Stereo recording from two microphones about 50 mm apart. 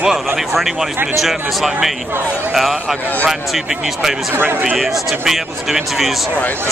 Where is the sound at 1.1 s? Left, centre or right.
Centre.